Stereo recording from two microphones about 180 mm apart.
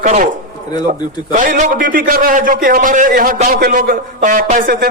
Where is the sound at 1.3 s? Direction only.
45° right (ahead or behind).